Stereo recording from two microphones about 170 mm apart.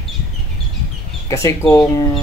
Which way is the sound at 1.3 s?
15° left (ahead or behind).